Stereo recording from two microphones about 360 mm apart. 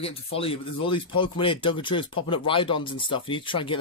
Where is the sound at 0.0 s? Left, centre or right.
Centre.